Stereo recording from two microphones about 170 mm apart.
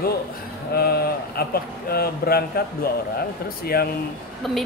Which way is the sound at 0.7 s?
65° left (ahead or behind).